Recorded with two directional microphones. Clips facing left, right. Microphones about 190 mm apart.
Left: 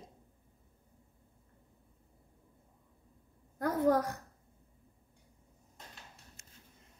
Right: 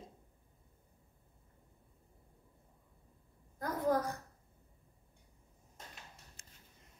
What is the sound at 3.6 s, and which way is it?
Speech, 65° left (ahead or behind).